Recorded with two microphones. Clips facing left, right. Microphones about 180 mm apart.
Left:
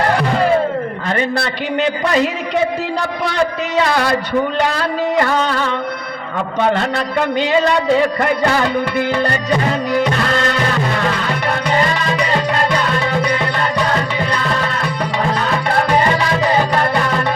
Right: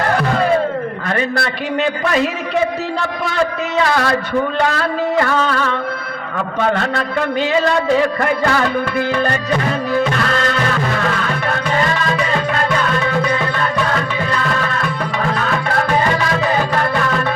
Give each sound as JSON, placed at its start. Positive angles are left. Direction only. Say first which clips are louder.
{"t": 1.0, "sound": "a sound", "louder": "left 1 dB", "side_deg": 20}
{"t": 5.2, "sound": "music", "louder": "even", "side_deg": 25}
{"t": 8.4, "sound": "music", "louder": "left 1 dB", "side_deg": 20}
{"t": 11.7, "sound": "music", "louder": "even", "side_deg": 30}